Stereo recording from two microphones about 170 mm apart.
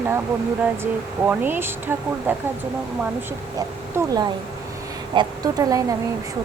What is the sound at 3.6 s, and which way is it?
Speech, 20° right (ahead or behind).